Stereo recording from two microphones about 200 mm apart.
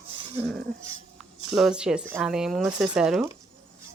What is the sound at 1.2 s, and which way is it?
A woman's voice, 5° right (ahead or behind).